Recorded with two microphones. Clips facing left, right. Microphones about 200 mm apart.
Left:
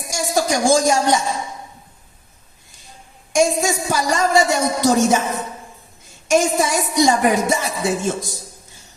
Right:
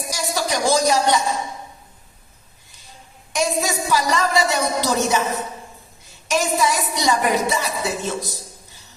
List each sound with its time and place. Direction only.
0.1 s a woman's voice: 45° left (ahead or behind)
3.3 s speech: 45° left (ahead or behind)
6.2 s speech: 45° left (ahead or behind)